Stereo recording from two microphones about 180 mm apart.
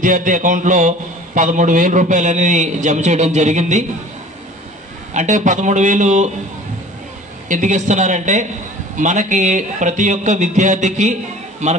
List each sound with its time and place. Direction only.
0.0 s a man's voice: 45° right (ahead or behind)
5.1 s a man's voice: 40° right (ahead or behind)
7.4 s a man's voice: 45° right (ahead or behind)